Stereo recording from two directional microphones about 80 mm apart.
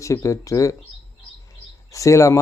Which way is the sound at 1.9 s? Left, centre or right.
Left.